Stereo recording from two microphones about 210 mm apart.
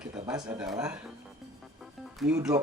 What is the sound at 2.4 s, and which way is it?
Speech, 15° right (ahead or behind).